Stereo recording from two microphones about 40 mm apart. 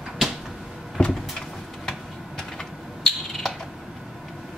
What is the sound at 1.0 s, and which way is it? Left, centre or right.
Cupboard open or close, left.